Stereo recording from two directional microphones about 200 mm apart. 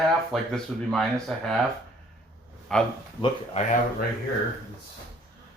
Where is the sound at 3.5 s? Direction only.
40° left (ahead or behind).